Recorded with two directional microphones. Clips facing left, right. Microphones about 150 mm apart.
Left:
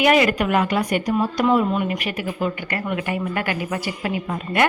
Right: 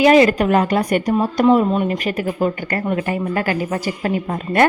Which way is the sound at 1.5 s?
30° right (ahead or behind).